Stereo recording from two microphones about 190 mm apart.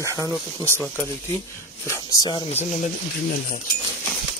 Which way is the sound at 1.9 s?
20° left (ahead or behind).